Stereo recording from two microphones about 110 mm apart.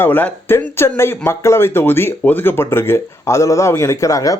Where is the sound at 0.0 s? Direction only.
15° left (ahead or behind).